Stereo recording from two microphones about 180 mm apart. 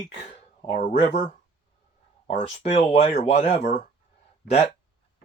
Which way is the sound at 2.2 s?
40° left (ahead or behind).